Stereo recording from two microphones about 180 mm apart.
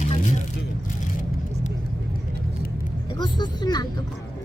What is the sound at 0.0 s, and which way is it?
Vehicle, 40° left (ahead or behind).